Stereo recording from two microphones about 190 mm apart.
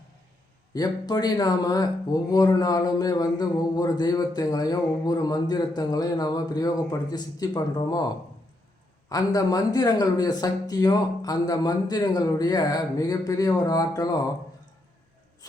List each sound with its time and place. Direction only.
0.7 s a man's voice: 20° left (ahead or behind)